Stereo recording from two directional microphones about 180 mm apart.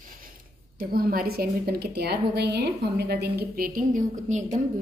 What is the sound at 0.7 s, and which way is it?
A woman's voice, 55° right (ahead or behind).